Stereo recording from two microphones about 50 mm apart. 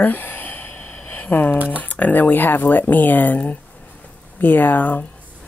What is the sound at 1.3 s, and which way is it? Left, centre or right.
Speech, left.